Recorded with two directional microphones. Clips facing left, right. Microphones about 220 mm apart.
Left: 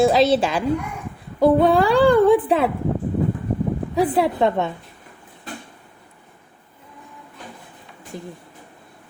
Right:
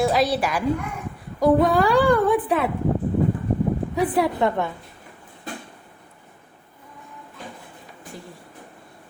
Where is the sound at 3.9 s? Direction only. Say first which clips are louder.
Left 5 dB; 30° left (ahead or behind).